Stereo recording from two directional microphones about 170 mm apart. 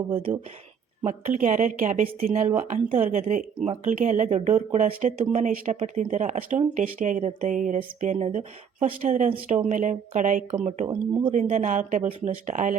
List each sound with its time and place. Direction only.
1.0 s speech: 45° right (ahead or behind); by 11.3 s 30° right (ahead or behind)
11.3 s speech: 45° right (ahead or behind)